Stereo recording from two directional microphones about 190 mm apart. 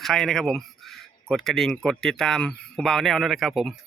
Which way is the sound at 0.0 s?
Centre (ahead or behind).